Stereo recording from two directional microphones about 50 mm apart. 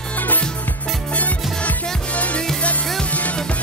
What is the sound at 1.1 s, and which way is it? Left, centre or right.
Music, left.